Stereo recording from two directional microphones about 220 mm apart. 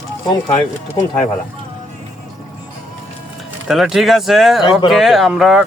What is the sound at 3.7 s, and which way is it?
Speech, centre (ahead or behind).